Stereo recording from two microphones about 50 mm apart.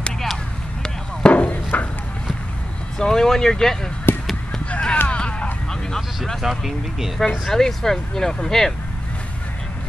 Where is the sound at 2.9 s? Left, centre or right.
Centre.